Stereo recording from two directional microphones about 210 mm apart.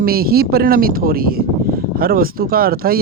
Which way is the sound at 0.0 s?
45° right (ahead or behind).